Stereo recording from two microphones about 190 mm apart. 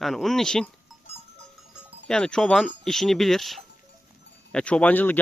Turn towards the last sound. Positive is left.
turn(degrees=10)  # may be behind; listen again after turning